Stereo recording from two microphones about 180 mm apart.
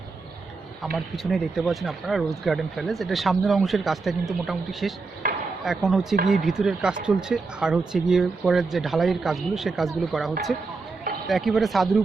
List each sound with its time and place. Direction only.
0.9 s speech: centre (ahead or behind)